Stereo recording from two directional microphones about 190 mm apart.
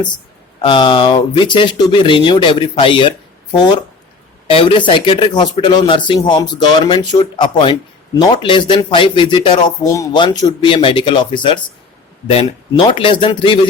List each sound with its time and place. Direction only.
0.6 s speech: 25° left (ahead or behind)